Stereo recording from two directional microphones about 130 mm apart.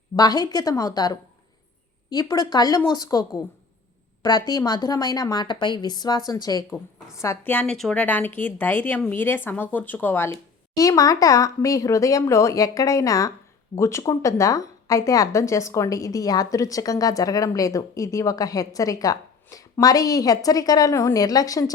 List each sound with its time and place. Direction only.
0.2 s a woman's voice: 30° left (ahead or behind)
7.5 s speech: 10° left (ahead or behind)
8.0 s speech: 15° left (ahead or behind)
10.8 s a woman's voice: 25° left (ahead or behind)